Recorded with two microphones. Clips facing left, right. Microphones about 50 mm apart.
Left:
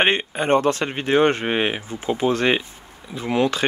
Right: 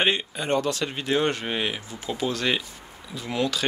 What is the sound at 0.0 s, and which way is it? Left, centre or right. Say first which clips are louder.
Speech: left 5 dB; left.